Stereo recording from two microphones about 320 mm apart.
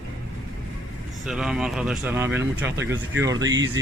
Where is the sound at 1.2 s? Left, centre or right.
Centre.